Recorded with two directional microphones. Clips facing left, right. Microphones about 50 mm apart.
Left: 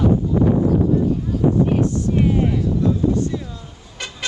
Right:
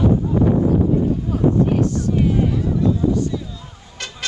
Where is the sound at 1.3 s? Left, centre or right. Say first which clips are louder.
Right 1 dB; right.